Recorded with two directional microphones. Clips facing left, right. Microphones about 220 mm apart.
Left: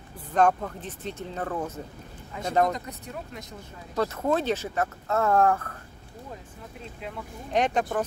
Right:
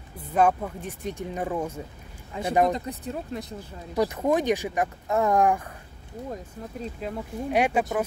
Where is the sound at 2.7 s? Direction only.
35° right (ahead or behind).